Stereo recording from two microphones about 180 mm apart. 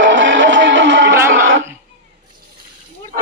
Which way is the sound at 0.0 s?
90° right.